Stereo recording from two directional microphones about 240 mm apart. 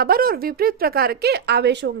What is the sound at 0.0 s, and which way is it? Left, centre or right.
Speech, right.